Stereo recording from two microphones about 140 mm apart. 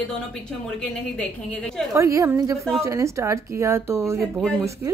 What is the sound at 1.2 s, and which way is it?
Speech, 10° left (ahead or behind).